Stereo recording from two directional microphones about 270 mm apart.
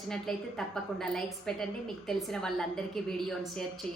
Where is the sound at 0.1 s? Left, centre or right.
Centre.